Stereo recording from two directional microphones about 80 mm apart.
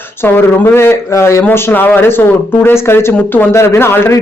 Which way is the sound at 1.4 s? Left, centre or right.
Left.